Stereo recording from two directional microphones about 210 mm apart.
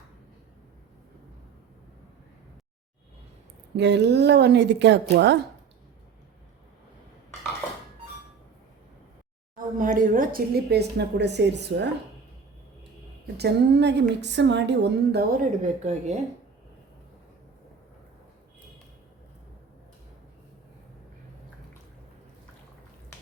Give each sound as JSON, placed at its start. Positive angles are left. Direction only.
{"t": 3.8, "sound": "a woman's voice", "side_deg": -55}
{"t": 9.7, "sound": "a woman's voice", "side_deg": -40}
{"t": 13.2, "sound": "a woman's voice", "side_deg": -50}
{"t": 15.8, "sound": "speech", "side_deg": -35}